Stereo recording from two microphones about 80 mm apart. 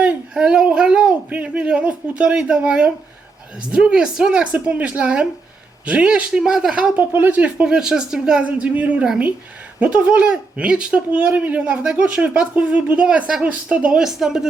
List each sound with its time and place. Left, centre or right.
0.0 s speech: centre
4.5 s speech: centre
6.9 s speech: right
7.7 s speech: centre